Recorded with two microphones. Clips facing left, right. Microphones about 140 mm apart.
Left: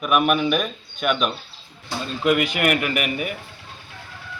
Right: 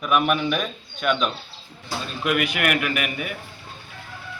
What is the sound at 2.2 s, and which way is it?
Speech, 25° left (ahead or behind).